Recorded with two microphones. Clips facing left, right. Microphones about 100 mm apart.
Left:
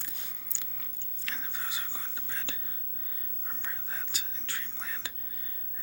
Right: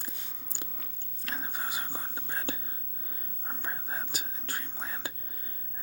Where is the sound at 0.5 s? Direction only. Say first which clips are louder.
Right 9 dB; 45° right (ahead or behind).